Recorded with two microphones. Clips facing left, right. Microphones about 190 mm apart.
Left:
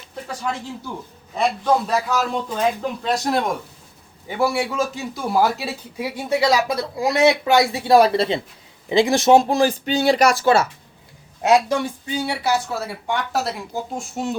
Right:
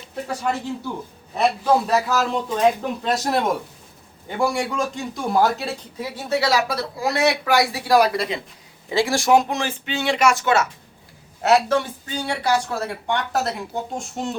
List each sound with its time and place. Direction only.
1.4 s speech: 5° right (ahead or behind); by 10.7 s 30° left (ahead or behind)
11.4 s speech: 15° left (ahead or behind)